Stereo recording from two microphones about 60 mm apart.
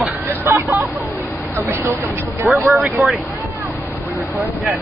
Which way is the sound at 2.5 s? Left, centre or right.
Centre.